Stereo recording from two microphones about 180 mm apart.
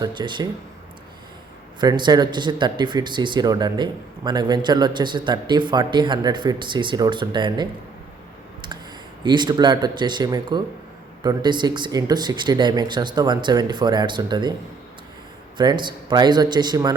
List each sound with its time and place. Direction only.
0.0 s speech: 25° right (ahead or behind)
1.8 s speech: 25° right (ahead or behind)
9.2 s speech: 25° right (ahead or behind)
15.5 s speech: 25° right (ahead or behind)